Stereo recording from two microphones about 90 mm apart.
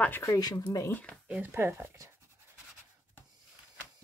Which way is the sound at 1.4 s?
25° right (ahead or behind).